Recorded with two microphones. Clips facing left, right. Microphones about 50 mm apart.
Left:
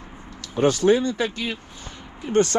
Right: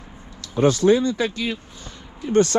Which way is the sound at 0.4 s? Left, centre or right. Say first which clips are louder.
Right 2 dB; left.